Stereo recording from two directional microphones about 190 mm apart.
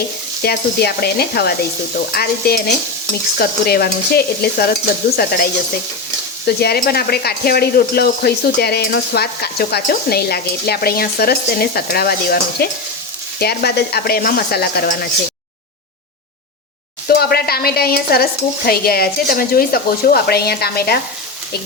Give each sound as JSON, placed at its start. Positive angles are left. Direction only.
{"t": 0.4, "sound": "speech", "side_deg": 55}
{"t": 17.1, "sound": "speech", "side_deg": 55}